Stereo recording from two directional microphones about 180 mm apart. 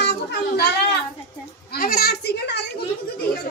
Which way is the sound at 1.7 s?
55° left (ahead or behind).